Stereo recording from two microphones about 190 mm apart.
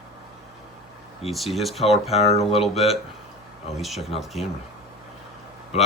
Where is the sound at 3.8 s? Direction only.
Centre (ahead or behind).